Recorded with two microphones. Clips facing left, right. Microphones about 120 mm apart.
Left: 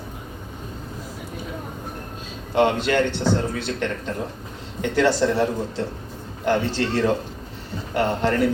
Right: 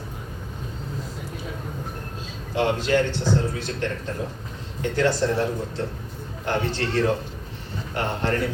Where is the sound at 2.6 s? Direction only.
60° left (ahead or behind).